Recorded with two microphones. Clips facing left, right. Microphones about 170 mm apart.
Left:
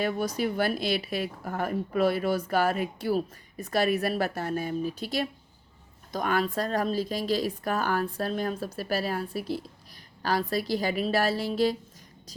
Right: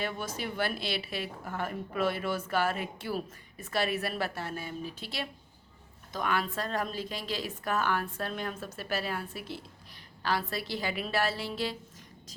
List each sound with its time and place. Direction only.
0.0 s a woman's voice: 40° left (ahead or behind)